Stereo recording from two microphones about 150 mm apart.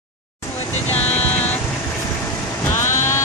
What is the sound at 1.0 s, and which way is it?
Vehicle, 45° left (ahead or behind).